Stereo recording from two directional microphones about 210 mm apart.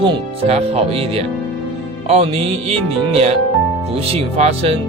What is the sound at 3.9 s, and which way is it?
Speech, 30° right (ahead or behind).